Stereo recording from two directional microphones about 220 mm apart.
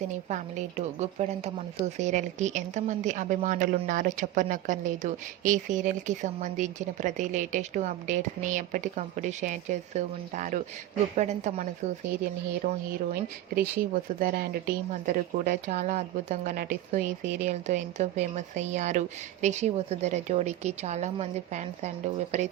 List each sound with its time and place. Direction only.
0.3 s a woman's voice: 35° right (ahead or behind)